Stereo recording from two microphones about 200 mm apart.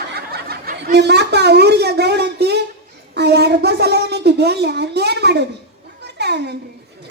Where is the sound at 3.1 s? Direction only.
55° right (ahead or behind).